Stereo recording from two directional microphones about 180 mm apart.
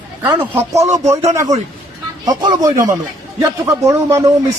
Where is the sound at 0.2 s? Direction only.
15° right (ahead or behind).